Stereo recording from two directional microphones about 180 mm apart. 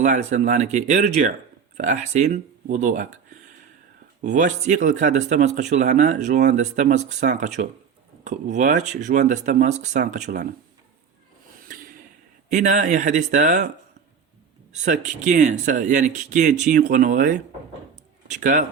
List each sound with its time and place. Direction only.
0.0 s speech: 40° right (ahead or behind)
4.2 s speech: 45° right (ahead or behind)
11.7 s a sound: 50° right (ahead or behind)
12.5 s speech: 45° right (ahead or behind)
14.7 s speech: 45° right (ahead or behind)